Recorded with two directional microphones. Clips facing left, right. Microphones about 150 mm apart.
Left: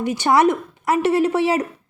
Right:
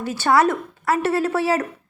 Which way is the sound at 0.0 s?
15° left (ahead or behind).